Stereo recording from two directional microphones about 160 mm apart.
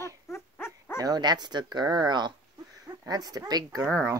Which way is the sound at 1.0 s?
25° right (ahead or behind).